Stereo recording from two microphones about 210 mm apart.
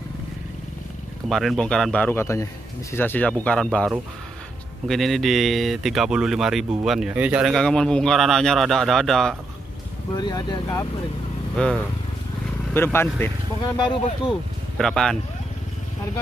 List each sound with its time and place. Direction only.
1.3 s speech: centre (ahead or behind)
10.1 s speech: 20° left (ahead or behind)
12.7 s speech: 10° left (ahead or behind)
13.7 s speech: 25° left (ahead or behind)
14.8 s speech: centre (ahead or behind)